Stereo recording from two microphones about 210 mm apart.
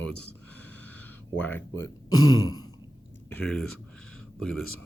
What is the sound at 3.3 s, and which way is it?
Speech, 5° left (ahead or behind).